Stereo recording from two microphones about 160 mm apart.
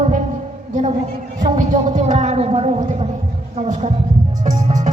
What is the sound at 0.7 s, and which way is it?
A woman's voice, 45° right (ahead or behind).